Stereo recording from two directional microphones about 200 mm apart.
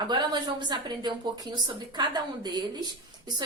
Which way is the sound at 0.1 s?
20° right (ahead or behind).